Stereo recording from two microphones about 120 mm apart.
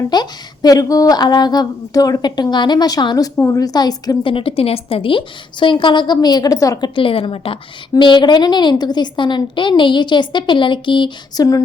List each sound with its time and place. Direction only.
0.1 s a woman's voice: 35° left (ahead or behind)
3.3 s a woman's voice: 25° left (ahead or behind)
4.3 s a woman's voice: 50° left (ahead or behind)